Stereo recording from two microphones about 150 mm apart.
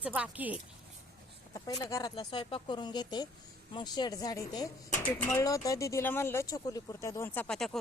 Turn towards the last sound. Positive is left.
turn(degrees=5)  # may be behind; listen again after turning